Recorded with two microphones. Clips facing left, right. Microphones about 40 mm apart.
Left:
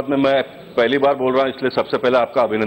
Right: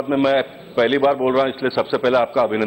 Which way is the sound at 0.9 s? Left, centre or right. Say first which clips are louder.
Left 1 dB; left.